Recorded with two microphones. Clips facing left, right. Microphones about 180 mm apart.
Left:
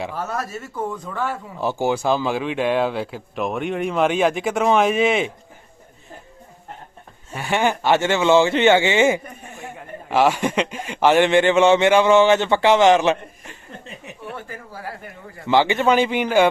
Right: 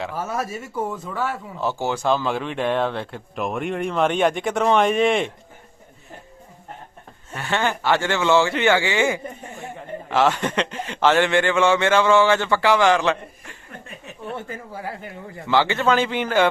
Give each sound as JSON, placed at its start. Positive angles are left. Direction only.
{"t": 0.2, "sound": "speech", "side_deg": -10}
{"t": 1.5, "sound": "speech", "side_deg": 15}
{"t": 7.3, "sound": "a man's voice", "side_deg": 15}
{"t": 14.3, "sound": "speech", "side_deg": -20}
{"t": 15.4, "sound": "a man's voice", "side_deg": 15}